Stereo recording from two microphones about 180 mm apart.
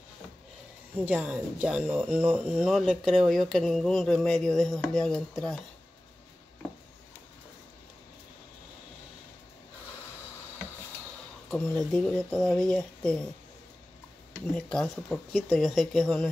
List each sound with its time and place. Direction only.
1.0 s speech: 5° right (ahead or behind)
11.5 s speech: 5° left (ahead or behind)
14.5 s speech: 5° left (ahead or behind)